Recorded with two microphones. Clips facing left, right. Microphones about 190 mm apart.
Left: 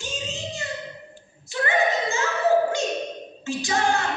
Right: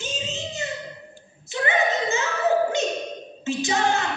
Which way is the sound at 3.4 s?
20° right (ahead or behind).